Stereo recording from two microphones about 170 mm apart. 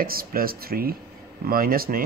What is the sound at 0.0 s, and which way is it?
Speech, 60° right (ahead or behind).